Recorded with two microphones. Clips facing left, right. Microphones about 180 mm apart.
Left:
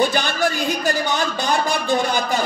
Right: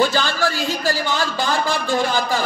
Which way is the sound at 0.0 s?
20° left (ahead or behind).